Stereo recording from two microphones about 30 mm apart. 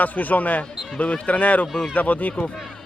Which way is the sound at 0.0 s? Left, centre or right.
Left.